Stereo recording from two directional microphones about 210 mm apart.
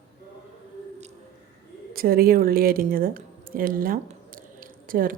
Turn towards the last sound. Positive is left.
turn(degrees=-40)  # may be behind; listen again after turning